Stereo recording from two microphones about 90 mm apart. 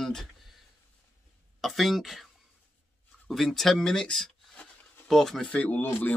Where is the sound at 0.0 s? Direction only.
5° left (ahead or behind).